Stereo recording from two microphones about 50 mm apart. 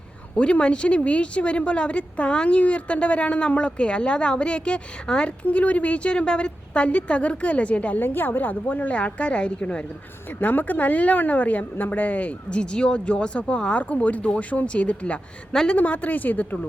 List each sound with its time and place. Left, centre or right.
0.3 s a woman's voice: left
7.9 s a woman's voice: left
8.8 s a woman's voice: left
10.2 s a woman's voice: left; by 15.8 s centre
15.8 s a woman's voice: left